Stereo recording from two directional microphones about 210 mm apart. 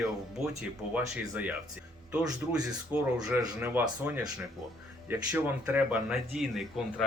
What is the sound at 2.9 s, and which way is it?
Speech, 5° right (ahead or behind).